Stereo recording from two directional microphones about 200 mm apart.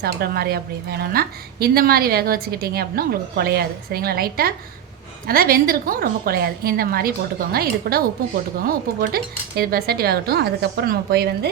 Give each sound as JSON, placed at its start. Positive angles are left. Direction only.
{"t": 0.0, "sound": "a woman's voice", "side_deg": -50}